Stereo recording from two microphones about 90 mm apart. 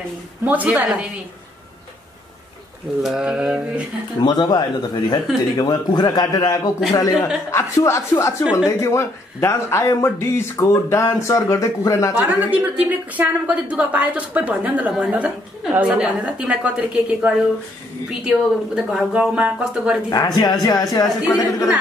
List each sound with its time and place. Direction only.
0.5 s a woman's voice: 20° right (ahead or behind)
3.0 s a woman's voice: 5° right (ahead or behind)
4.2 s a man's voice: 55° left (ahead or behind)
7.5 s speech: 30° left (ahead or behind)
12.2 s a woman's voice: 20° right (ahead or behind)
20.1 s a man's voice: 50° left (ahead or behind)